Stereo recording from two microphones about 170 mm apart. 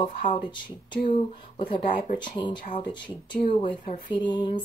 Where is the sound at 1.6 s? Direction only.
50° left (ahead or behind).